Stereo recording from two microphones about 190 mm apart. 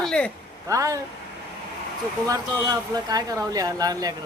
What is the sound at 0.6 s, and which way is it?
Speech, 15° right (ahead or behind).